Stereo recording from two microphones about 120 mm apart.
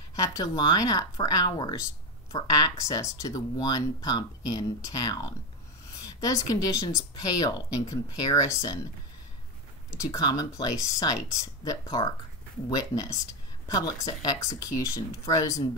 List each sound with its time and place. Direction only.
0.1 s speech: 30° left (ahead or behind)
9.8 s speech: 25° left (ahead or behind)